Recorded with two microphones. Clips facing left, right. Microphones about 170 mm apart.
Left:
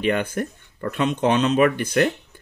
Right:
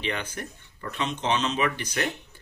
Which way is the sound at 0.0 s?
50° left (ahead or behind).